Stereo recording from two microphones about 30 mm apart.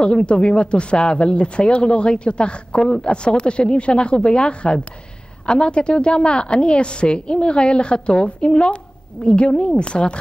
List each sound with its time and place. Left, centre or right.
0.0 s speech: left